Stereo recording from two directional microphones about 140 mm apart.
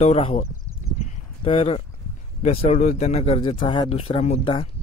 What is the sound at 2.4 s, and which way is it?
Speech, 50° left (ahead or behind).